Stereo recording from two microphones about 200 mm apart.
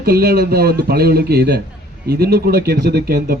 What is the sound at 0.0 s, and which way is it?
Speech, 50° right (ahead or behind).